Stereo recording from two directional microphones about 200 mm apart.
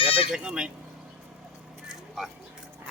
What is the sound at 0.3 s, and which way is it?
Speech, 5° right (ahead or behind).